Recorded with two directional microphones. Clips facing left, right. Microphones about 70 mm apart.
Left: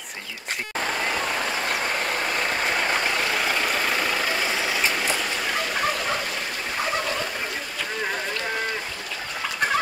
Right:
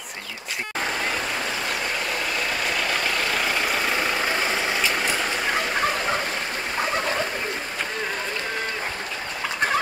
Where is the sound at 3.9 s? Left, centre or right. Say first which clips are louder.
Right 1 dB; right.